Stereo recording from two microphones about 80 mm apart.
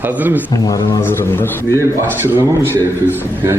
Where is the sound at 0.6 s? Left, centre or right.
Left.